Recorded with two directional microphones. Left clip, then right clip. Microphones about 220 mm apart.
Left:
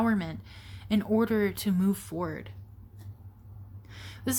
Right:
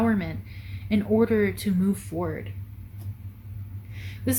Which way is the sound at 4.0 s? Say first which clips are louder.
Right 4 dB; 40° left (ahead or behind).